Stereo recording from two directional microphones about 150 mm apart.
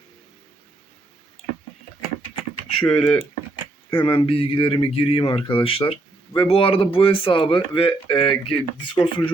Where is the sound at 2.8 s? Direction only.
5° left (ahead or behind).